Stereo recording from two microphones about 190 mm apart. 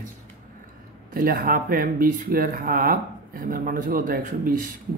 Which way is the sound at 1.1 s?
50° right (ahead or behind).